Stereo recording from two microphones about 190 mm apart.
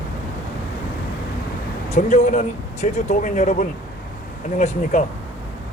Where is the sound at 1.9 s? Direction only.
40° left (ahead or behind).